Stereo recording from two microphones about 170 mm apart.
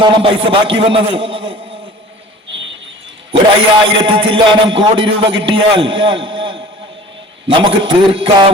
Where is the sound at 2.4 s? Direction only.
90° right.